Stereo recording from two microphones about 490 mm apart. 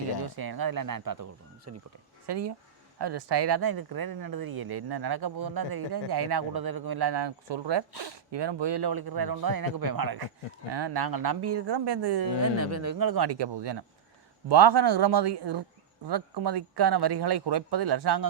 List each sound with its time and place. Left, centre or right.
0.3 s speech: right
1.7 s speech: right
2.2 s speech: right
12.4 s speech: right